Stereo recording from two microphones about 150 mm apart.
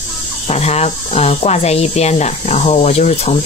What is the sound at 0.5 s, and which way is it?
Speech, 45° left (ahead or behind).